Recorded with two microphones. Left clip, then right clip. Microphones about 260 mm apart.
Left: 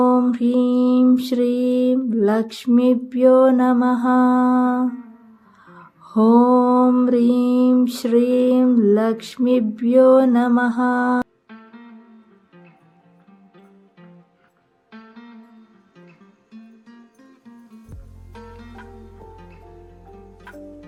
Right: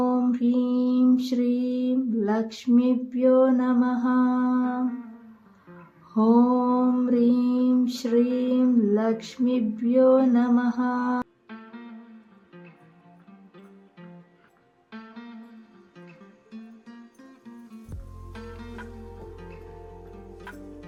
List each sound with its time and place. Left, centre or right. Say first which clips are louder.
0.0 s mantra: left 7 dB; left
5.7 s music: left 6 dB; left
11.4 s music: even; centre
14.9 s music: even; centre